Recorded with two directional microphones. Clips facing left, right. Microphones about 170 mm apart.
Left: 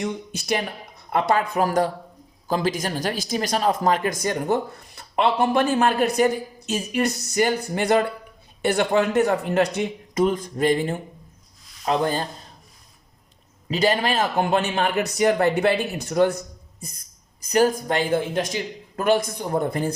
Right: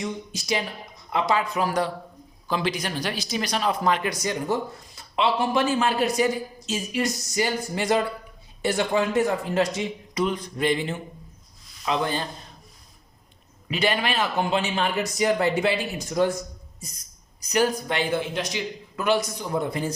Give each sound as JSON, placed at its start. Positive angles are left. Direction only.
{"t": 0.0, "sound": "a man's voice", "side_deg": 60}
{"t": 10.2, "sound": "speech", "side_deg": 45}
{"t": 13.7, "sound": "a man's voice", "side_deg": 40}
{"t": 17.4, "sound": "speech", "side_deg": 45}